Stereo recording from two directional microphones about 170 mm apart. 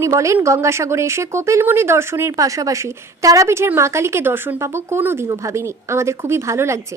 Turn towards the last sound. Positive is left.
turn(degrees=-15)  # may be behind; listen again after turning